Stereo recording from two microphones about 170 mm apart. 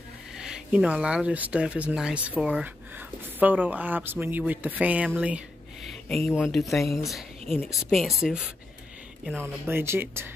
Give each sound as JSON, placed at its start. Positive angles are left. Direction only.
{"t": 0.4, "sound": "speech", "side_deg": -5}
{"t": 6.0, "sound": "speech", "side_deg": 5}